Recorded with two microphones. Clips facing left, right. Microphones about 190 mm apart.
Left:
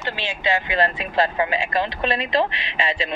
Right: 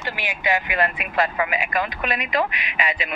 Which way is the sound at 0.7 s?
30° left (ahead or behind).